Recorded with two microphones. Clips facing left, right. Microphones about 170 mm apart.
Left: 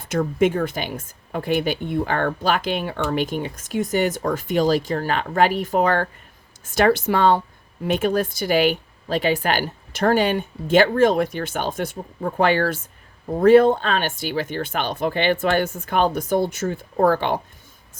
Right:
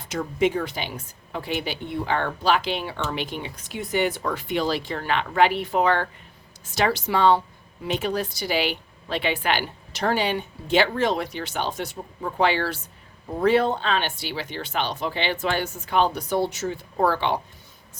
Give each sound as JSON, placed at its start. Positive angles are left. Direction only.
{"t": 0.0, "sound": "a woman's voice", "side_deg": 50}